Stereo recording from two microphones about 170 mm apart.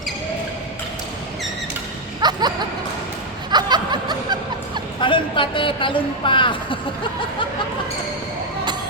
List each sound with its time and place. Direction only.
2.2 s a sound: 25° right (ahead or behind)
3.5 s snicker: 25° right (ahead or behind)
4.9 s a woman's voice: 30° left (ahead or behind)